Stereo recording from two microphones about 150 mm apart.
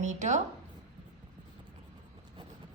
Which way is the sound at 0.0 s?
50° right (ahead or behind).